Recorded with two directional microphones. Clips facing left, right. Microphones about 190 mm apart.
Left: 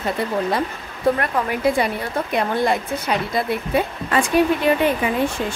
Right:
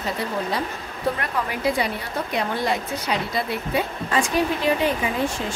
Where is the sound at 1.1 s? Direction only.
50° left (ahead or behind).